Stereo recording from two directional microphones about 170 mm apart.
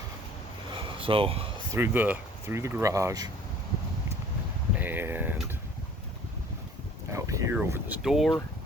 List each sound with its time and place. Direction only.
0.9 s a sound: 30° right (ahead or behind)
1.7 s speech: 10° right (ahead or behind)
4.7 s vehicle: 10° right (ahead or behind)
7.1 s speech: 15° right (ahead or behind); by 8.4 s centre (ahead or behind)